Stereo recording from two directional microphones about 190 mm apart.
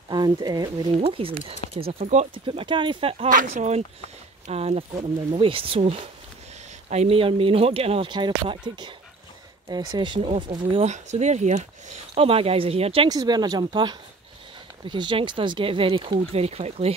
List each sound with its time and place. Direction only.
0.1 s speech: 20° right (ahead or behind)
3.3 s speech: 40° right (ahead or behind)